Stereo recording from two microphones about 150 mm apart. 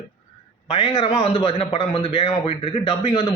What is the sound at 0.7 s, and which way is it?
A man's voice, 35° left (ahead or behind).